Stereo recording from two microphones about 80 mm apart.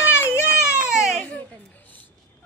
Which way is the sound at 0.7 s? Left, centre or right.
Centre.